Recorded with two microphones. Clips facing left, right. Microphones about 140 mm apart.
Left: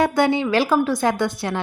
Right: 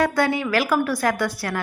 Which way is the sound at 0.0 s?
25° left (ahead or behind).